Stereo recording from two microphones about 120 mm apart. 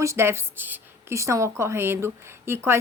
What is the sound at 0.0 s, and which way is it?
A woman's voice, 25° right (ahead or behind).